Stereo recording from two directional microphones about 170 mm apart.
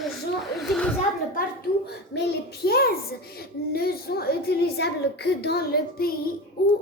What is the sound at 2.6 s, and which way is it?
A child's voice, 65° left (ahead or behind).